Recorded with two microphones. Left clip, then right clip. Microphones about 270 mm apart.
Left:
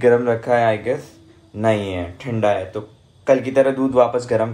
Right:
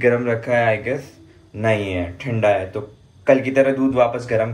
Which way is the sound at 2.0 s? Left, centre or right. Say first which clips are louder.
Even; centre.